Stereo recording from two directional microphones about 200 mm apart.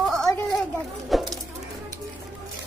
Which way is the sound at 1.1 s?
Centre (ahead or behind).